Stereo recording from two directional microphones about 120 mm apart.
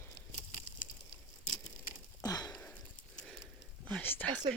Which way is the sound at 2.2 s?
30° left (ahead or behind).